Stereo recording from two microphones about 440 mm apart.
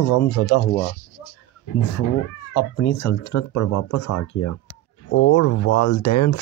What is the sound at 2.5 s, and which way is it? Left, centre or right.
Speech, left.